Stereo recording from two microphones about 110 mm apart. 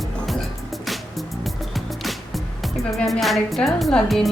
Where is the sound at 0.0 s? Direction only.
Centre (ahead or behind).